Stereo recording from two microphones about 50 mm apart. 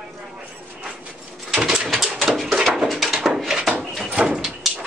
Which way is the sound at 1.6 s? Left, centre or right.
Centre.